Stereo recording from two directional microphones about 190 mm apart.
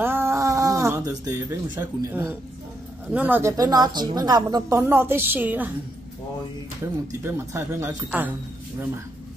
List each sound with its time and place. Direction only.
0.0 s a sound: 10° right (ahead or behind)
3.1 s a woman's voice: 10° right (ahead or behind)
7.1 s a woman's voice: 15° right (ahead or behind)